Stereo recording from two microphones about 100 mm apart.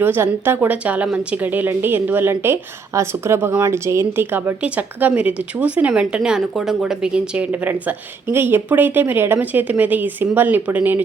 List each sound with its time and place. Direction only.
0.0 s speech: 20° right (ahead or behind)